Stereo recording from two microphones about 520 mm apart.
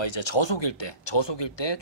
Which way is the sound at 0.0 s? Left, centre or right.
Left.